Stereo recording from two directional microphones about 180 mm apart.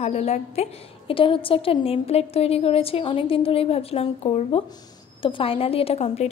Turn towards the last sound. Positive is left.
turn(degrees=35)  # may be behind; listen again after turning